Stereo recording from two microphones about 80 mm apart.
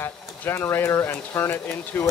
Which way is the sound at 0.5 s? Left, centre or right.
Left.